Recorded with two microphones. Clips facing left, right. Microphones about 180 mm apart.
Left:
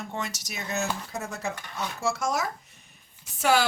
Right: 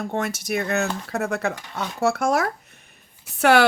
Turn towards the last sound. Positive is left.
turn(degrees=-65)  # may be behind; listen again after turning